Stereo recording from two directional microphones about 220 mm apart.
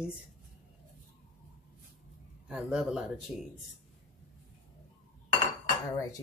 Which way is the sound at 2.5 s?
5° right (ahead or behind).